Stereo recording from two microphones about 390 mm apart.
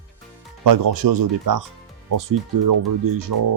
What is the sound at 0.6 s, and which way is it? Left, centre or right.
Speech, right.